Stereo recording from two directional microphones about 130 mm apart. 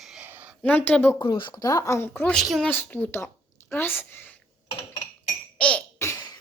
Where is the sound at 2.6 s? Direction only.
15° left (ahead or behind).